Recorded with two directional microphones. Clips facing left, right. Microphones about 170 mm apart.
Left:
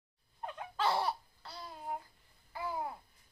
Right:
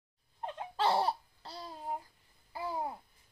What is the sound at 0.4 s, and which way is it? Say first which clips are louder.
Babbling: right 3 dB; 30° right (ahead or behind).